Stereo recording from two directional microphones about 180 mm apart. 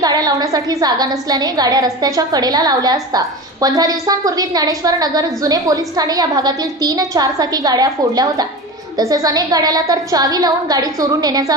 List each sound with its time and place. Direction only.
0.0 s a woman's voice: 20° right (ahead or behind)